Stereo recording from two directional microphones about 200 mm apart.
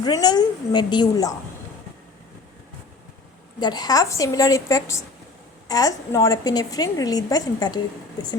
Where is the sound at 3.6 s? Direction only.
20° left (ahead or behind).